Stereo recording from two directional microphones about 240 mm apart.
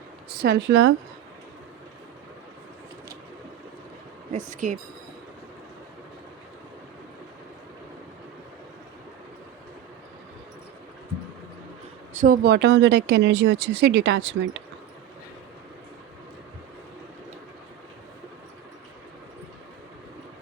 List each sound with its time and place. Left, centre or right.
0.3 s speech: right
4.3 s speech: right
12.1 s speech: right